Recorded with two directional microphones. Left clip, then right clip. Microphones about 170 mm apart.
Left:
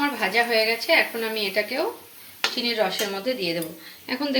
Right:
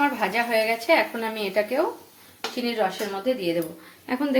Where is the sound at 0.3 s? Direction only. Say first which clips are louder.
Left 5 dB; 20° right (ahead or behind).